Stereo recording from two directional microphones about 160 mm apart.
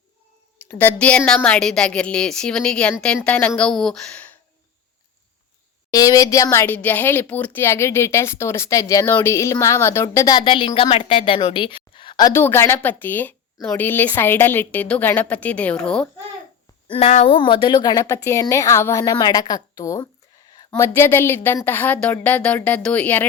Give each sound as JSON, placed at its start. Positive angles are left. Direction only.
{"t": 0.6, "sound": "a woman's voice", "side_deg": 10}
{"t": 5.9, "sound": "speech", "side_deg": 20}
{"t": 12.4, "sound": "a woman's voice", "side_deg": 15}
{"t": 16.9, "sound": "speech", "side_deg": 45}
{"t": 17.3, "sound": "a woman's voice", "side_deg": 35}